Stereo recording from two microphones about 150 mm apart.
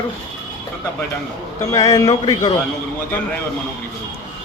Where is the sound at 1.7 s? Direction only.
20° left (ahead or behind).